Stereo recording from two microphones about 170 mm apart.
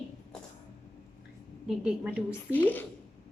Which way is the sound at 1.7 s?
5° right (ahead or behind).